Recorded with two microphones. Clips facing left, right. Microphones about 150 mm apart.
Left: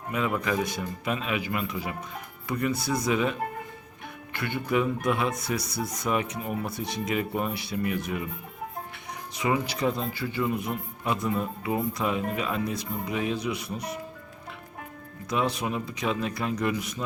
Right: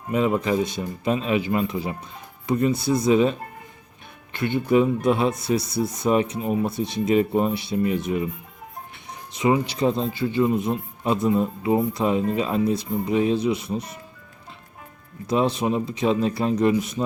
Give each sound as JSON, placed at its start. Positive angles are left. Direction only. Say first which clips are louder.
{"t": 0.1, "sound": "speech", "louder": "right 6 dB", "side_deg": -25}
{"t": 9.3, "sound": "speech", "louder": "right 6 dB", "side_deg": -25}
{"t": 15.3, "sound": "speech", "louder": "right 6 dB", "side_deg": -25}